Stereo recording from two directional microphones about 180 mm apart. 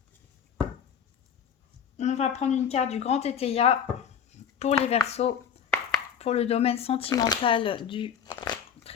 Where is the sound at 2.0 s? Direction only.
40° left (ahead or behind).